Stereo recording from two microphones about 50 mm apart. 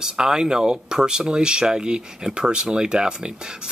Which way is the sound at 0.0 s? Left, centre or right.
Centre.